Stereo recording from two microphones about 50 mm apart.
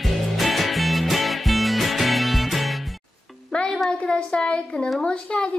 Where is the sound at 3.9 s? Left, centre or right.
Centre.